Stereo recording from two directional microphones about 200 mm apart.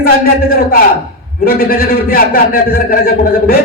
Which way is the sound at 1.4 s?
45° left (ahead or behind).